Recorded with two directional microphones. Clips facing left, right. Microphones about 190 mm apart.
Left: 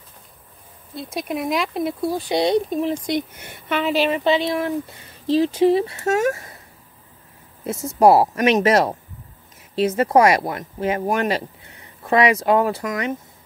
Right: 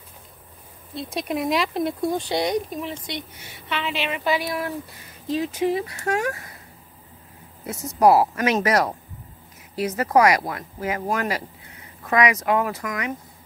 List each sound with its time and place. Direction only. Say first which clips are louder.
0.9 s speech: even; centre (ahead or behind)
2.2 s speech: left 5 dB; 25° left (ahead or behind)
3.3 s speech: left 6 dB; 55° left (ahead or behind); by 6.5 s 25° left (ahead or behind)
7.6 s speech: left 3 dB; 25° left (ahead or behind)